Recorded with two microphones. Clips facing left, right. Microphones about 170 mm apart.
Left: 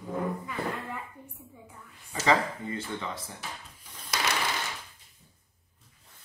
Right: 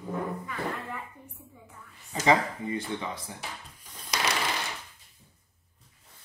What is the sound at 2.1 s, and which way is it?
Speech, 15° right (ahead or behind).